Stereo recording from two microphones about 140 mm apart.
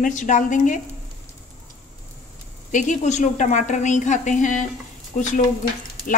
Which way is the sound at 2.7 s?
60° left (ahead or behind).